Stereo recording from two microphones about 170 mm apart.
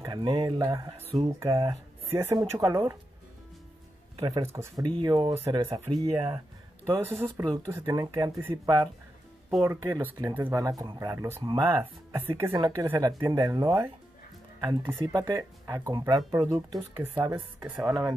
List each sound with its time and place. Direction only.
0.0 s speech: 25° right (ahead or behind)
2.0 s speech: 15° right (ahead or behind)
4.5 s speech: 15° right (ahead or behind)
4.9 s speech: 30° right (ahead or behind)
6.9 s speech: 15° right (ahead or behind)
7.4 s speech: 25° right (ahead or behind)